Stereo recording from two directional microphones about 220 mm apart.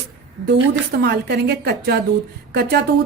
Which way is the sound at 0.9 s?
45° right (ahead or behind).